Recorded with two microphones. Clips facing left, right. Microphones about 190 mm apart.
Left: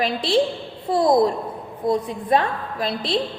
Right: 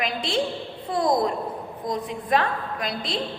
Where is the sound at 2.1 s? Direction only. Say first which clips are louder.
Left 3 dB; 30° left (ahead or behind).